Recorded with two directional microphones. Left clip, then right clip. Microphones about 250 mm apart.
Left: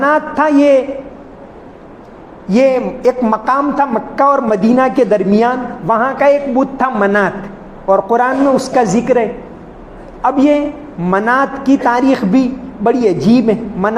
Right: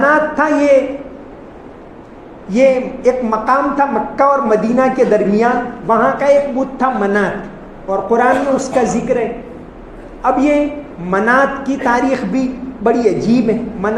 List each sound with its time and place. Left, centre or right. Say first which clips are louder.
0.0 s a sound: even; left
2.5 s a man's voice: even; left
10.2 s a man's voice: left 1 dB; left